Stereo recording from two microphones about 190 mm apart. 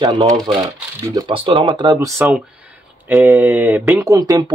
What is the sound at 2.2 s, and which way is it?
Speech, 5° right (ahead or behind).